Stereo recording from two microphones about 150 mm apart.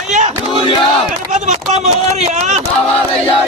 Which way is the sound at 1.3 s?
50° right (ahead or behind).